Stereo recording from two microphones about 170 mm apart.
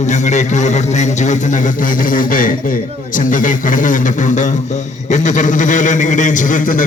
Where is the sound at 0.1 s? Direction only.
45° left (ahead or behind).